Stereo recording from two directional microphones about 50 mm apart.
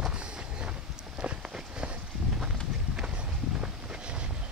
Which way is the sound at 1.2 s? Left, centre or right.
Right.